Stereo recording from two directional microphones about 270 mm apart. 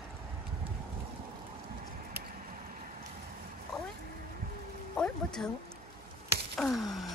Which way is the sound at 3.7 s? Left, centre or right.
Centre.